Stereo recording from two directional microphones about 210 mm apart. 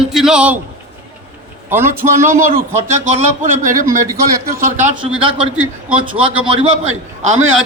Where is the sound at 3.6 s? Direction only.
40° right (ahead or behind).